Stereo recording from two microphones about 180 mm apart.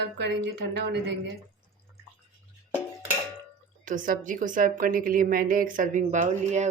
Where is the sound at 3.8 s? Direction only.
50° right (ahead or behind).